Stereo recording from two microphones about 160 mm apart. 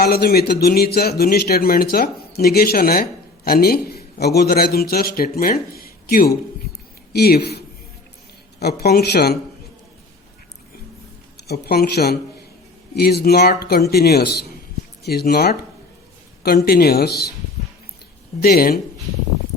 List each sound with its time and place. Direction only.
0.0 s speech: 75° left (ahead or behind)
7.1 s speech: 85° left
11.4 s speech: 85° left
16.4 s speech: 70° left (ahead or behind)
18.3 s speech: 70° left (ahead or behind)